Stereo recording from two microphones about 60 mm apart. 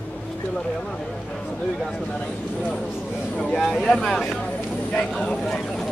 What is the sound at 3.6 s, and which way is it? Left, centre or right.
Speech, centre.